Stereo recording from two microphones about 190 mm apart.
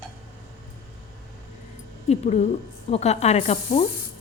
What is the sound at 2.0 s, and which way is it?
A woman's voice, 35° left (ahead or behind).